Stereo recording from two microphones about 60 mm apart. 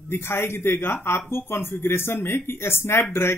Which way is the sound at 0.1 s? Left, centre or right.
Left.